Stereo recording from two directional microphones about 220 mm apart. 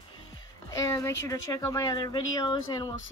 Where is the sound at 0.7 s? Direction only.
15° left (ahead or behind).